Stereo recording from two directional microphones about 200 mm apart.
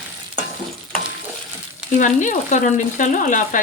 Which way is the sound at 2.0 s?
40° left (ahead or behind).